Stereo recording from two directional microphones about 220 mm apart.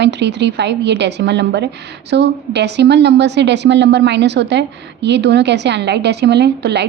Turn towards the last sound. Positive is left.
turn(degrees=-50)  # may be behind; listen again after turning